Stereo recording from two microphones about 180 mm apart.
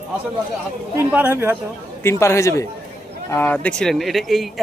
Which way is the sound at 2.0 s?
15° left (ahead or behind).